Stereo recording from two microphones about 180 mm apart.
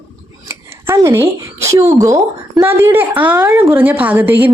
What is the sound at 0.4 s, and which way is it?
A woman's voice, 15° right (ahead or behind).